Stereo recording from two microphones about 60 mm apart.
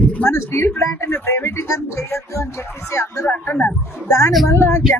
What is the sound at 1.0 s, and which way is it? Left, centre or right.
Speech, left.